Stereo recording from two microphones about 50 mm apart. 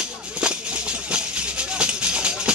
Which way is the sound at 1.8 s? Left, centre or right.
Right.